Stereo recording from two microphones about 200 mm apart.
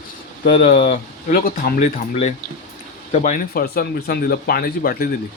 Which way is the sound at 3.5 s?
50° left (ahead or behind).